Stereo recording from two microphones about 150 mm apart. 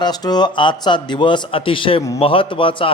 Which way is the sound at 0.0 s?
25° left (ahead or behind).